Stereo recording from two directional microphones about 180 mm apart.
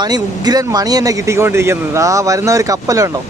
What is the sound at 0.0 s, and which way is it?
Speech, 20° right (ahead or behind).